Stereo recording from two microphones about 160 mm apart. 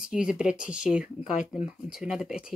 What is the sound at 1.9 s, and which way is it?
Speech, 5° right (ahead or behind).